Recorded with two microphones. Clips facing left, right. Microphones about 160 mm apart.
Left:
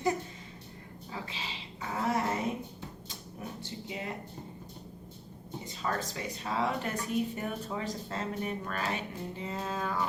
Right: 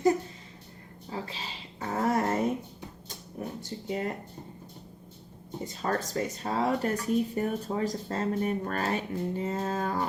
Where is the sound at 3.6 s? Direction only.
45° right (ahead or behind).